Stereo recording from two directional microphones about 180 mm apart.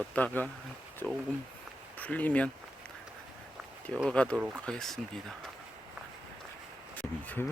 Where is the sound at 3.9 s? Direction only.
5° left (ahead or behind).